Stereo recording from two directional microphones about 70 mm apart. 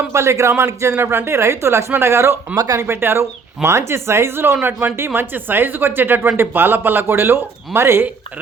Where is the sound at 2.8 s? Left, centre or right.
Right.